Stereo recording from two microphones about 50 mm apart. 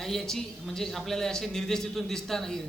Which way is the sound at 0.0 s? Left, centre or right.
Centre.